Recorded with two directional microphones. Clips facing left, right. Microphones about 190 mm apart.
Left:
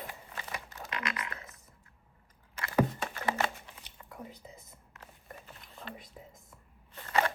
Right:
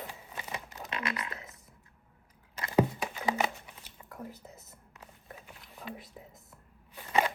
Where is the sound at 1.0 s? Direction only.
30° right (ahead or behind).